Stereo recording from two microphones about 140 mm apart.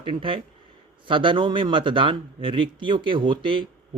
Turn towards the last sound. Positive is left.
turn(degrees=-35)  # may be behind; listen again after turning